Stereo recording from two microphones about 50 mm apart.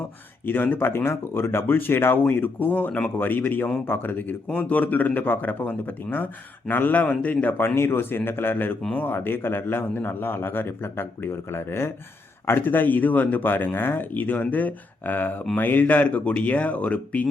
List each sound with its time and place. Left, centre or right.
0.4 s a man's voice: left
7.0 s a man's voice: left
7.8 s a man's voice: left
12.5 s speech: left